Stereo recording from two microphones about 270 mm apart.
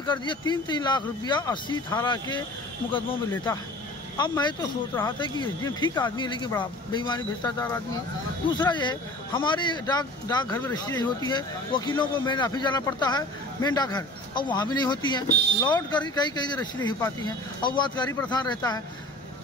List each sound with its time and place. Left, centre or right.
0.0 s a man's voice: centre
4.2 s a man's voice: centre